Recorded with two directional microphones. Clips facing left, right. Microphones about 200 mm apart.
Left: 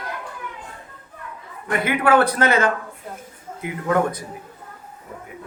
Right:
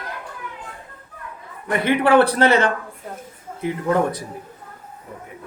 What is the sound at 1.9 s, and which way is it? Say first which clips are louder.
Speech: right 3 dB; 35° right (ahead or behind).